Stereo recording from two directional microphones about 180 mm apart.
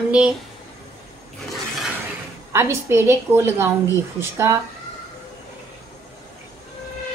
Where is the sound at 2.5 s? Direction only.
15° right (ahead or behind).